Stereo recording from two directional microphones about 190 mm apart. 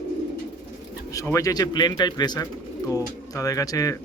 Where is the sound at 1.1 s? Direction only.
15° left (ahead or behind).